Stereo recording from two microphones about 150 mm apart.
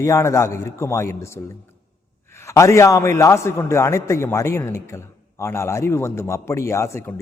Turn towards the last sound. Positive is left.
turn(degrees=20)  # may be behind; listen again after turning